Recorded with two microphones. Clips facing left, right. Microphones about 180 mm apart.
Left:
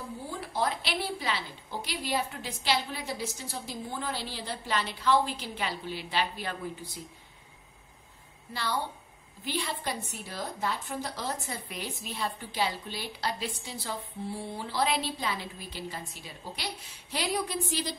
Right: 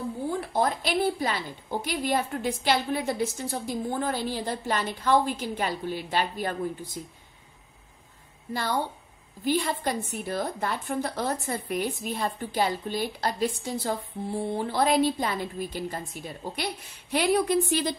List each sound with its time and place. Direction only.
0.5 s a woman's voice: 50° right (ahead or behind)
9.4 s a woman's voice: 45° right (ahead or behind)